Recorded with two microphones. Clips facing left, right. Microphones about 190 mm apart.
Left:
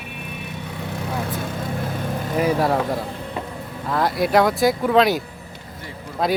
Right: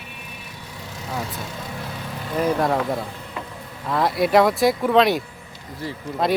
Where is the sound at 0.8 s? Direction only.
60° left (ahead or behind).